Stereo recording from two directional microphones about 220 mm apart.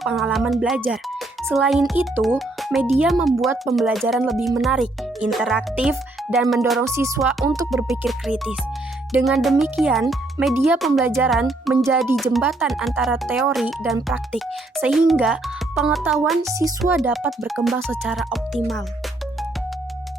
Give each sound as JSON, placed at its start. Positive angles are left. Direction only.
{"t": 0.0, "sound": "speech", "side_deg": 0}
{"t": 7.4, "sound": "music", "side_deg": -15}
{"t": 7.7, "sound": "speech", "side_deg": 0}
{"t": 16.5, "sound": "music", "side_deg": -15}
{"t": 16.8, "sound": "speech", "side_deg": 0}